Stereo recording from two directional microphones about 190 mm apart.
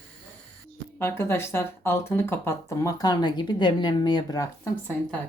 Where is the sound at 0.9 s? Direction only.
10° left (ahead or behind).